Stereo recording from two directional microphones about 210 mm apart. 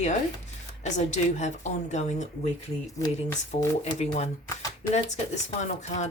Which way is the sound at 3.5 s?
30° left (ahead or behind).